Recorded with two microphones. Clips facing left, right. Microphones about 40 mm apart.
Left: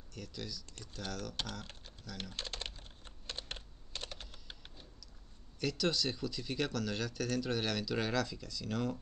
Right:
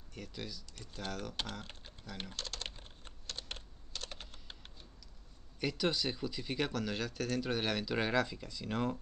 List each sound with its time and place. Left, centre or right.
0.1 s speech: centre
2.3 s speech: left
4.1 s typing: centre
5.6 s speech: centre